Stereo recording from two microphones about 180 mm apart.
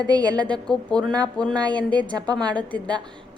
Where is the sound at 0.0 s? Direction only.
20° right (ahead or behind).